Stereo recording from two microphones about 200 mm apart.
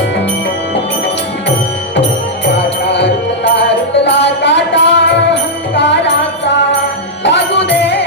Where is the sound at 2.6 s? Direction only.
60° left (ahead or behind).